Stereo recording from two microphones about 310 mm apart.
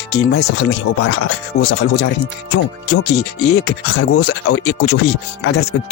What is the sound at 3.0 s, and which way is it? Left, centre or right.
Speech, left.